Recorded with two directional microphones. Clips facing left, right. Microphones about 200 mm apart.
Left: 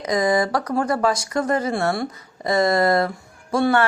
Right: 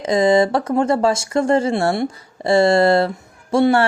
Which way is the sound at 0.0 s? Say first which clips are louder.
Right 5 dB; 25° right (ahead or behind).